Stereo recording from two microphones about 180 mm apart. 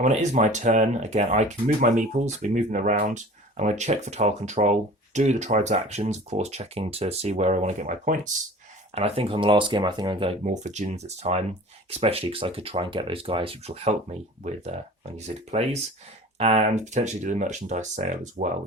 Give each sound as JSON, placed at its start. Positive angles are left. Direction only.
{"t": 0.0, "sound": "speech", "side_deg": -40}
{"t": 9.0, "sound": "speech", "side_deg": -35}